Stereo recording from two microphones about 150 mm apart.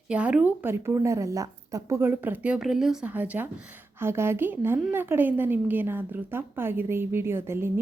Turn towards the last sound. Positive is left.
turn(degrees=-15)  # may be behind; listen again after turning